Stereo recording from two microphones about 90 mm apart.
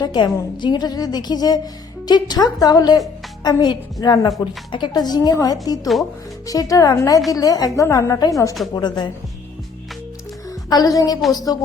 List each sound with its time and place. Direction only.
0.0 s a woman's voice: 55° left (ahead or behind); by 8.3 s 40° left (ahead or behind)
8.7 s a woman's voice: 55° left (ahead or behind)
10.7 s a woman's voice: 45° left (ahead or behind)